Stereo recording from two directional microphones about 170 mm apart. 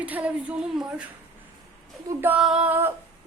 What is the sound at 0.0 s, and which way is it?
A woman's voice, 10° right (ahead or behind).